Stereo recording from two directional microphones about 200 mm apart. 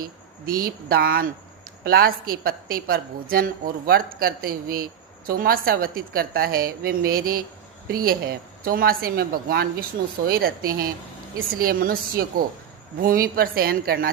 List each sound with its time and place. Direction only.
0.0 s a woman's voice: 45° right (ahead or behind)